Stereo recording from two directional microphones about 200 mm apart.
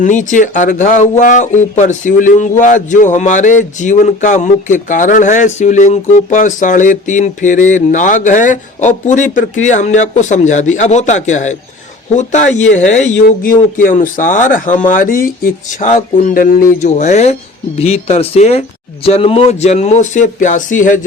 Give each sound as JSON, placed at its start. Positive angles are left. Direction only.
{"t": 0.0, "sound": "speech", "side_deg": 40}